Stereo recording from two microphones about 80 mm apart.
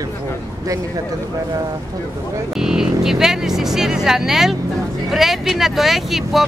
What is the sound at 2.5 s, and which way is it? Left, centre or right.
Speech, centre.